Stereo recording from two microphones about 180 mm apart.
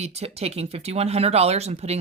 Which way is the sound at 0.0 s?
35° right (ahead or behind).